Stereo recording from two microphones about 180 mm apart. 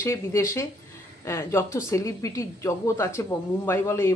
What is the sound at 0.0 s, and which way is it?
Speech, 15° left (ahead or behind).